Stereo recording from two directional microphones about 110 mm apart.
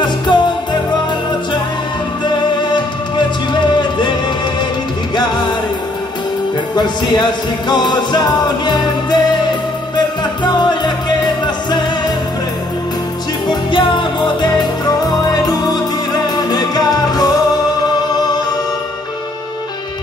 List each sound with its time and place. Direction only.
0.0 s music: 45° left (ahead or behind)
2.2 s music: 45° left (ahead or behind)
6.7 s music: 40° left (ahead or behind)
13.5 s music: 45° left (ahead or behind)